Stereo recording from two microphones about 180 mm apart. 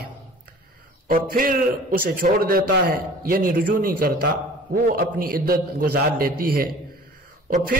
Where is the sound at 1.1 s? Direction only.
50° right (ahead or behind).